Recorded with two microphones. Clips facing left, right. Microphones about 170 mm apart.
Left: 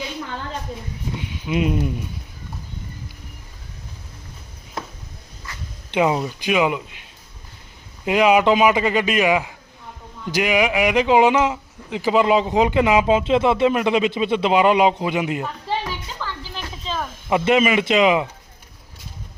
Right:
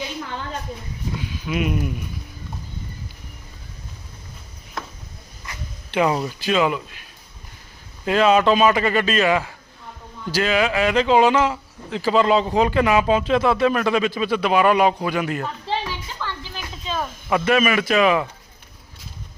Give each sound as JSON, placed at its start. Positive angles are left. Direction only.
{"t": 1.1, "sound": "a man's voice", "side_deg": 25}
{"t": 5.5, "sound": "dog", "side_deg": -20}
{"t": 5.9, "sound": "speech", "side_deg": 20}
{"t": 16.8, "sound": "snake", "side_deg": -5}
{"t": 17.2, "sound": "a man's voice", "side_deg": 20}